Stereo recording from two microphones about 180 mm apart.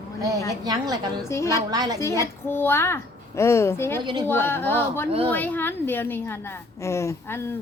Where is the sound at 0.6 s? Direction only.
20° right (ahead or behind).